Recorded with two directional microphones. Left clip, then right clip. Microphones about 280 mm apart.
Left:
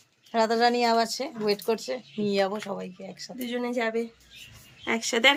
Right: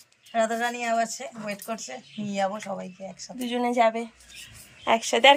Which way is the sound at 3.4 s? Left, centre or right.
Centre.